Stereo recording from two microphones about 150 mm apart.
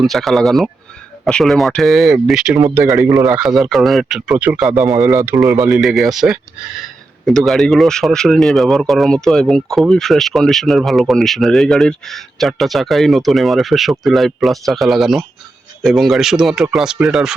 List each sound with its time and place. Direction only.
0.0 s speech: centre (ahead or behind)
2.8 s a man's voice: 20° right (ahead or behind)
3.2 s speech: 5° right (ahead or behind)
5.5 s a man's voice: 20° right (ahead or behind)
5.7 s speech: centre (ahead or behind)